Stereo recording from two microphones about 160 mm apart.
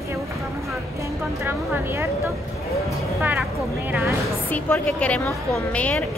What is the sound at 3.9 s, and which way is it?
Speech, 15° right (ahead or behind).